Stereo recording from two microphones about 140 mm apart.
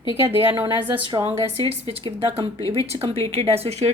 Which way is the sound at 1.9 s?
40° right (ahead or behind).